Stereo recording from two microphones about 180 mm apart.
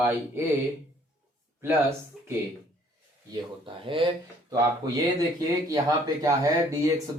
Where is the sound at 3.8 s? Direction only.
30° right (ahead or behind).